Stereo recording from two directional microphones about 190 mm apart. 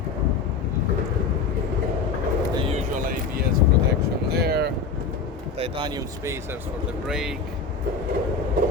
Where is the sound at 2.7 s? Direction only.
40° right (ahead or behind).